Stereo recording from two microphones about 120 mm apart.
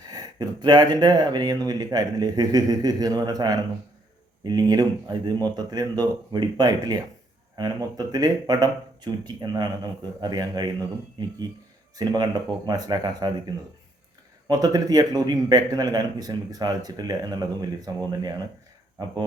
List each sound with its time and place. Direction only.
0.1 s speech: 35° right (ahead or behind)